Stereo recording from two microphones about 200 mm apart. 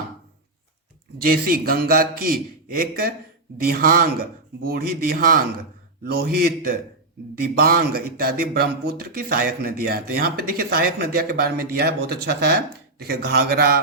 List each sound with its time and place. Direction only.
1.2 s speech: 50° right (ahead or behind)